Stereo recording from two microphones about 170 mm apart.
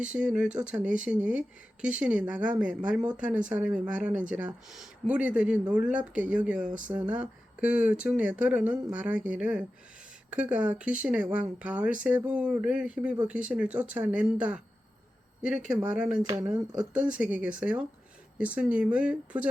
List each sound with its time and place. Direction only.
0.0 s speech: 5° right (ahead or behind)
16.2 s speech: 20° right (ahead or behind)
17.1 s speech: 10° right (ahead or behind)